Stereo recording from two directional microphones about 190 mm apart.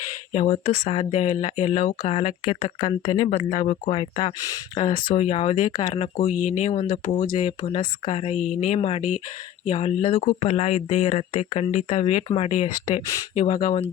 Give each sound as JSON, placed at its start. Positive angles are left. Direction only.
{"t": 0.3, "sound": "speech", "side_deg": 35}